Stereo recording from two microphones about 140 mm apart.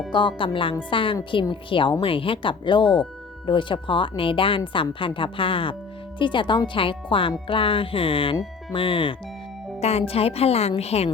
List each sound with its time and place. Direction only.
0.1 s a woman's voice: 35° left (ahead or behind)